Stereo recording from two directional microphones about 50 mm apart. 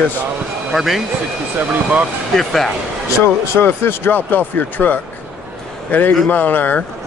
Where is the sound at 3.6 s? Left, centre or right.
Left.